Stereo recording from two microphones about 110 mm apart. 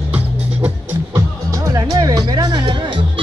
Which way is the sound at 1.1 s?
30° right (ahead or behind).